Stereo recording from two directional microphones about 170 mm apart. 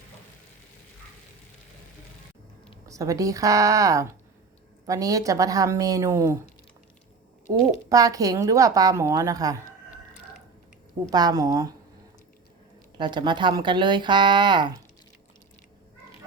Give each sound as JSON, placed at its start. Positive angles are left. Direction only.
{"t": 2.8, "sound": "speech", "side_deg": -20}
{"t": 7.5, "sound": "speech", "side_deg": -25}
{"t": 11.1, "sound": "speech", "side_deg": -25}
{"t": 13.0, "sound": "speech", "side_deg": -25}